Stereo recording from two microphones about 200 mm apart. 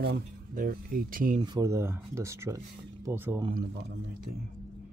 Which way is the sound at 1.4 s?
20° right (ahead or behind).